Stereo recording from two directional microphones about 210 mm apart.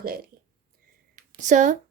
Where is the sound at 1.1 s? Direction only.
35° right (ahead or behind).